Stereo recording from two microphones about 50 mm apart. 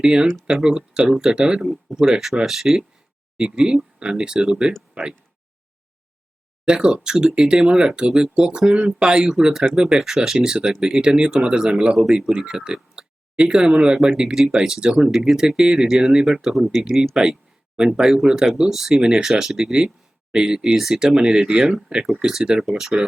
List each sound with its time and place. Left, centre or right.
0.0 s speech: centre
3.3 s speech: centre
6.7 s speech: centre
10.0 s speech: centre